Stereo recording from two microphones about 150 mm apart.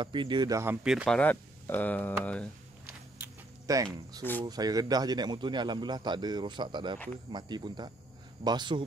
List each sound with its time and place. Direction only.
0.0 s a man's voice: 30° right (ahead or behind)
0.8 s speech: 5° right (ahead or behind)
1.1 s speech: 10° left (ahead or behind)
3.6 s a man's voice: 20° right (ahead or behind)
4.2 s speech: 10° left (ahead or behind)
4.5 s a man's voice: 25° right (ahead or behind)